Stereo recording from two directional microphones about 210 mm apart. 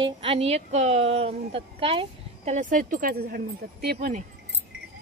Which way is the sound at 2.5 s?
40° right (ahead or behind).